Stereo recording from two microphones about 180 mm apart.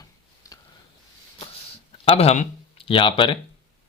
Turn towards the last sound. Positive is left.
turn(degrees=30)  # may be behind; listen again after turning